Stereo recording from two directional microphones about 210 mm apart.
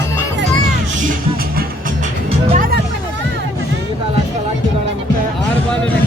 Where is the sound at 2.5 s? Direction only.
40° right (ahead or behind).